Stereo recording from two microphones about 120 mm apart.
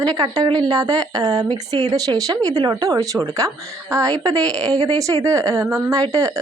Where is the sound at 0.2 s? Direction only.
35° right (ahead or behind).